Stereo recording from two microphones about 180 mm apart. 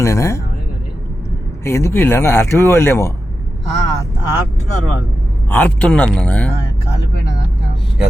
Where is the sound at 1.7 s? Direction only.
15° left (ahead or behind).